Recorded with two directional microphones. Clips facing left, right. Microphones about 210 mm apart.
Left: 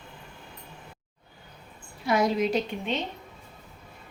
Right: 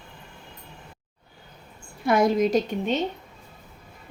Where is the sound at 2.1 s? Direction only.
50° right (ahead or behind).